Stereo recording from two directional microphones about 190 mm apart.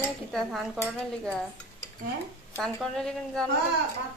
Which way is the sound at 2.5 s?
Centre (ahead or behind).